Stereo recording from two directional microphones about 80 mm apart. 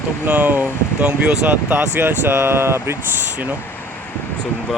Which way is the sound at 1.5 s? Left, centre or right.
Right.